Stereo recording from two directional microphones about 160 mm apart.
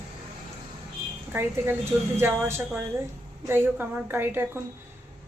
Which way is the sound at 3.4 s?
15° right (ahead or behind).